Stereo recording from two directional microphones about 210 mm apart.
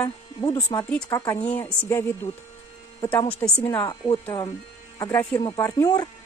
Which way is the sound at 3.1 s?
10° left (ahead or behind).